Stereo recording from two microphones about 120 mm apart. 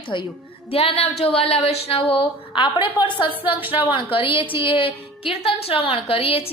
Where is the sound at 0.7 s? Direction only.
55° left (ahead or behind).